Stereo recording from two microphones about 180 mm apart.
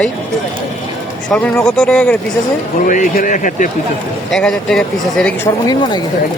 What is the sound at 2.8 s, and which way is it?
Speech, 45° left (ahead or behind).